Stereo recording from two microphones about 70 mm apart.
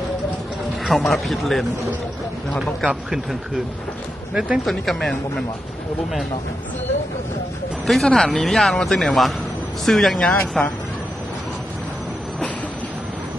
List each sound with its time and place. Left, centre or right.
0.8 s a man's voice: centre
2.9 s speech: centre
4.6 s a man's voice: centre
7.8 s a man's voice: centre